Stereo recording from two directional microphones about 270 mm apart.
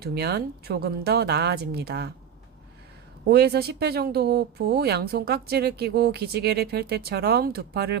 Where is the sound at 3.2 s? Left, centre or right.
Right.